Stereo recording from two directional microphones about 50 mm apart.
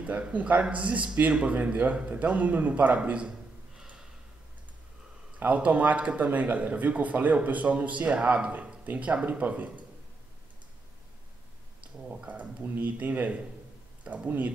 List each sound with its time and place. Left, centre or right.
0.0 s speech: right
5.5 s speech: right
12.1 s speech: right